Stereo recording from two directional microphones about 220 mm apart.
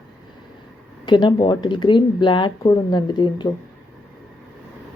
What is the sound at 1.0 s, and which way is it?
A woman's voice, 20° left (ahead or behind).